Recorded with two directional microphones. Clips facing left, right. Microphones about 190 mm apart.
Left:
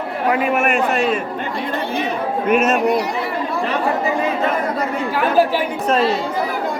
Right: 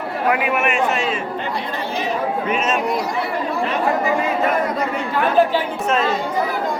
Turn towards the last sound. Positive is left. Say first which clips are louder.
# left 3 dB
turn(degrees=35)  # may be behind; listen again after turning